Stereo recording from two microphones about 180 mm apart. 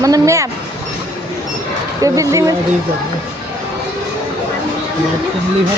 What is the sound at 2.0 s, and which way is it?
Speech, 15° right (ahead or behind).